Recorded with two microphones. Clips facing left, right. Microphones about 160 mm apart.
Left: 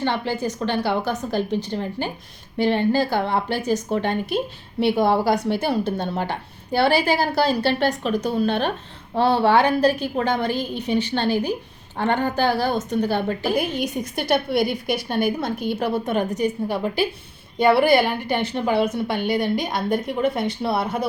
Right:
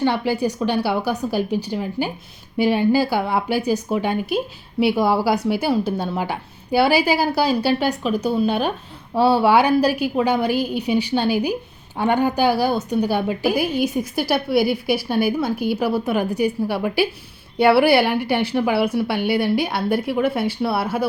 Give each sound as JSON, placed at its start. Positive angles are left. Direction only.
{"t": 0.0, "sound": "a woman's voice", "side_deg": -10}